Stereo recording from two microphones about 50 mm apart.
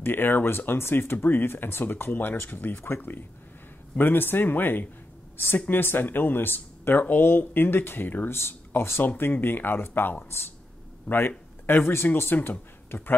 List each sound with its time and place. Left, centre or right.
0.0 s speech: left
8.3 s speech: left
9.0 s speech: left